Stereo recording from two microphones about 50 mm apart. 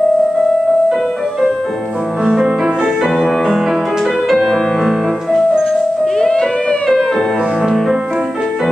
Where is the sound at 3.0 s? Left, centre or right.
Centre.